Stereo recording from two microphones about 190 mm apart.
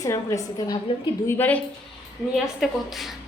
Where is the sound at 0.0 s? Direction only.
15° left (ahead or behind).